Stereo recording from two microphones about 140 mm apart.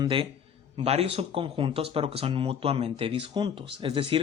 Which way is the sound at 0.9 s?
45° right (ahead or behind).